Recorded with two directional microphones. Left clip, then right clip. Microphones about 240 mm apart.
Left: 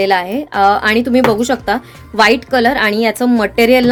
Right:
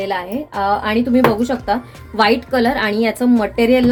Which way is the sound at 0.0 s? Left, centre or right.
Left.